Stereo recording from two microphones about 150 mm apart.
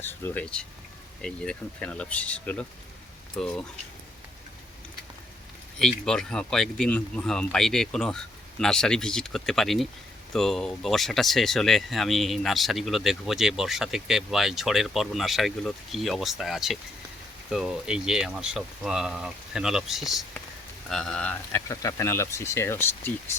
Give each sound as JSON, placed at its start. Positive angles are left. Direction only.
{"t": 0.0, "sound": "speech", "side_deg": 15}
{"t": 5.8, "sound": "speech", "side_deg": 5}
{"t": 21.7, "sound": "speech", "side_deg": 20}